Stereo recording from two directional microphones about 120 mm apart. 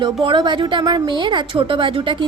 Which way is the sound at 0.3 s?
40° right (ahead or behind).